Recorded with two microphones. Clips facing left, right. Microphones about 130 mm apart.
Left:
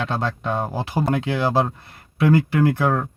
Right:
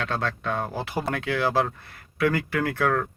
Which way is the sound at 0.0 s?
20° left (ahead or behind).